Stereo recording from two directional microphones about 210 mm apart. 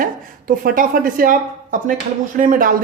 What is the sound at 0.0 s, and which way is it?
A woman's voice, 40° right (ahead or behind).